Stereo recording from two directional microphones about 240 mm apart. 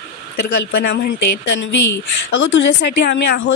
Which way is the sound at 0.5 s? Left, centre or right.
Left.